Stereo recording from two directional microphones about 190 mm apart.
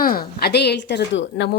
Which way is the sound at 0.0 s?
50° left (ahead or behind).